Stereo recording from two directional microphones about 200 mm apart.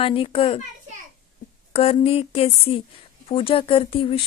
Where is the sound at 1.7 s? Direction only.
30° left (ahead or behind).